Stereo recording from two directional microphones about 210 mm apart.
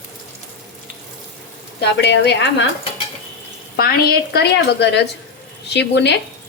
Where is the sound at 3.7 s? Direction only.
45° left (ahead or behind).